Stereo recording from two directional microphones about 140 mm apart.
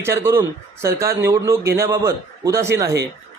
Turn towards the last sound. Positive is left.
turn(degrees=-25)  # may be behind; listen again after turning